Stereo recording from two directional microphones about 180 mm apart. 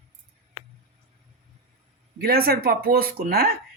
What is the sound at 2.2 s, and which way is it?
Speech, 55° right (ahead or behind).